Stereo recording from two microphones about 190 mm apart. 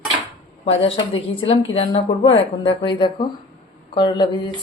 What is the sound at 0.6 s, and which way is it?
A woman's voice, 30° left (ahead or behind).